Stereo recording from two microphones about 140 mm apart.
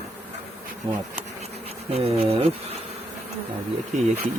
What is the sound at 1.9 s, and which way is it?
Insect, 45° right (ahead or behind).